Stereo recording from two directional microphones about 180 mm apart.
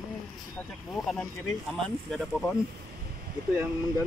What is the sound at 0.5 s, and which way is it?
Speech, 5° left (ahead or behind).